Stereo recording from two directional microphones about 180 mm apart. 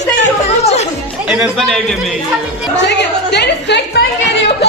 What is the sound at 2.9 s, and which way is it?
Speech, 70° left (ahead or behind).